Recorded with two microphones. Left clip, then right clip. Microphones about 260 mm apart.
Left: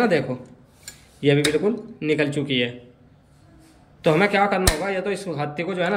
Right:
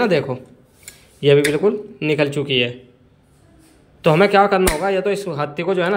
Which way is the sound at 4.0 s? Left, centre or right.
Centre.